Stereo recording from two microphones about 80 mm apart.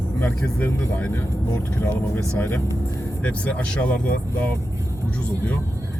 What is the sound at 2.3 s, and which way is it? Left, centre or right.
Speech, left.